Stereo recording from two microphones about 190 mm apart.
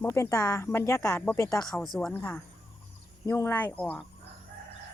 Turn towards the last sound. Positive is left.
turn(degrees=5)  # may be behind; listen again after turning